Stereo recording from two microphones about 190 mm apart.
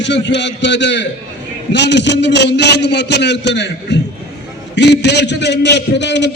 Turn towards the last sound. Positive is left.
turn(degrees=65)  # may be behind; listen again after turning